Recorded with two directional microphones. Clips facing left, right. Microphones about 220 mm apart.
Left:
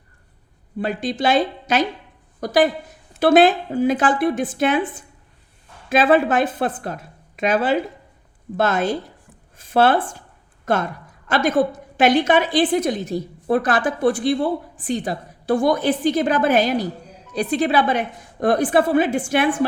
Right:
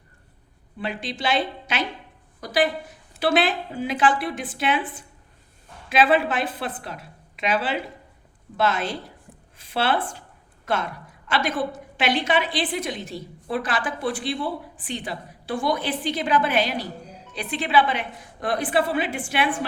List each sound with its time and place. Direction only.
0.8 s a woman's voice: 45° left (ahead or behind)